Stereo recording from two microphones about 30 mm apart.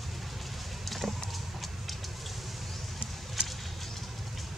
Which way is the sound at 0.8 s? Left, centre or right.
Centre.